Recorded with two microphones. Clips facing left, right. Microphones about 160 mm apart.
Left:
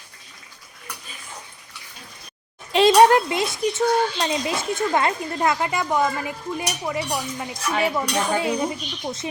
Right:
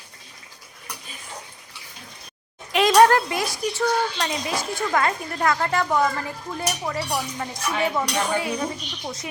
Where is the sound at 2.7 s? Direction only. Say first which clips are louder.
Left 2 dB; 25° left (ahead or behind).